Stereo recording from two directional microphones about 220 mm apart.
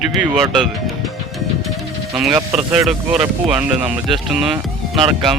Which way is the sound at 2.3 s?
20° right (ahead or behind).